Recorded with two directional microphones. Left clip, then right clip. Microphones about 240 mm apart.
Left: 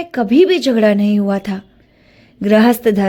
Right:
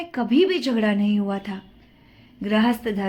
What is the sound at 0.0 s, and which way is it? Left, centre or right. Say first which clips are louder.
A woman's voice: left 8 dB; left.